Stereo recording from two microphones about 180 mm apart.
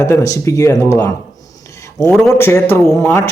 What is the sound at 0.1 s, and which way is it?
Speech, 15° left (ahead or behind).